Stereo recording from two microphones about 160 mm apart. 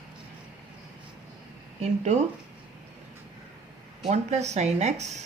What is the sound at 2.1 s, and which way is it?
Speech, 45° right (ahead or behind).